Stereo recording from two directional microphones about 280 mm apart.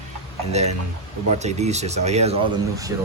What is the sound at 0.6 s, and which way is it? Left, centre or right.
Speech, right.